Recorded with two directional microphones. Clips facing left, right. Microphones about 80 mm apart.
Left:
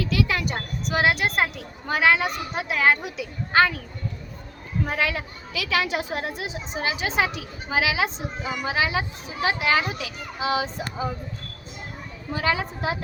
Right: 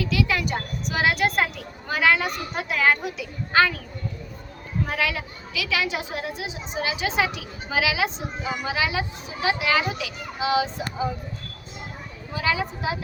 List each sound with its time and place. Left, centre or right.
0.0 s speech: left
4.9 s speech: left
12.3 s a woman's voice: left